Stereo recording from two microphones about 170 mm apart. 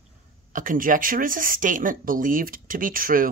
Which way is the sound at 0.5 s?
50° right (ahead or behind).